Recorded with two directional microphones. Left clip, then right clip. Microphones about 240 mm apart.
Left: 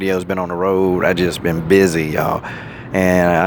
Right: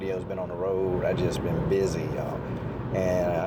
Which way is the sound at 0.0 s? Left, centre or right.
Left.